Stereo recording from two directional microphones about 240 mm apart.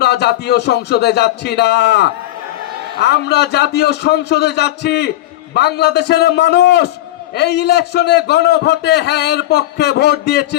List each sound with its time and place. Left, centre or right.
0.0 s a man's voice: left